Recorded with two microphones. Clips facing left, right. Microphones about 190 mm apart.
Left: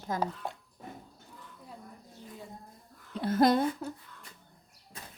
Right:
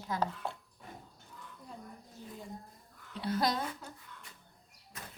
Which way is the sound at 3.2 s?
50° left (ahead or behind).